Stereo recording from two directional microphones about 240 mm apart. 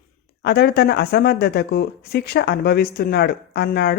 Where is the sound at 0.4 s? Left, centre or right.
Left.